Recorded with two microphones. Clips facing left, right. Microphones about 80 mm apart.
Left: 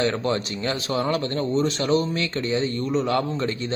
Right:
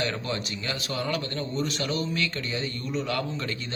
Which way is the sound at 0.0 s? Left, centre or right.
Left.